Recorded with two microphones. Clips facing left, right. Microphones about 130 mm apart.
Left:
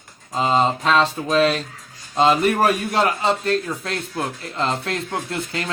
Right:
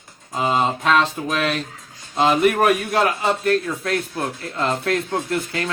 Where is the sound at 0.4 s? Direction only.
25° left (ahead or behind).